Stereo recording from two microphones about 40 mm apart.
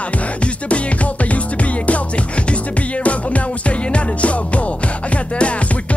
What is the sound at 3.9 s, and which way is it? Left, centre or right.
Music, left.